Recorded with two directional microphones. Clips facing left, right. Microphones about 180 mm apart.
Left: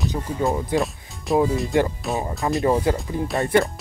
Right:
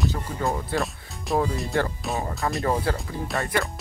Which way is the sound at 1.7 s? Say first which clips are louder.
Left 3 dB; 20° left (ahead or behind).